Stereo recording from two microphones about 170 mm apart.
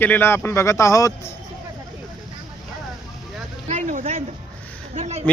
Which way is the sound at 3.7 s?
50° right (ahead or behind).